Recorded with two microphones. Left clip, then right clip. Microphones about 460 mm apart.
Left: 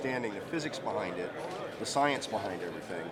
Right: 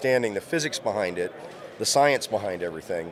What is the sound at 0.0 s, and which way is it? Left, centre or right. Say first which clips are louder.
Speech: right 11 dB; right.